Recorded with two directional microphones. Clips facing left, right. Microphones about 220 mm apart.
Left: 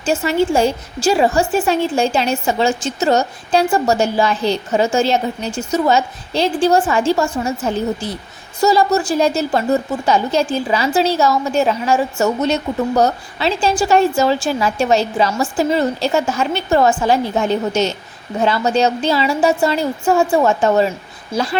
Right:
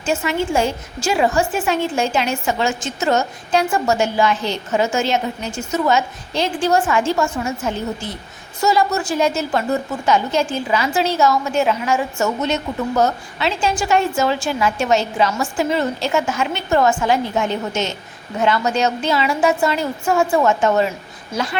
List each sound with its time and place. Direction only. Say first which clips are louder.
0.0 s a woman's voice: left 4 dB; 35° left (ahead or behind)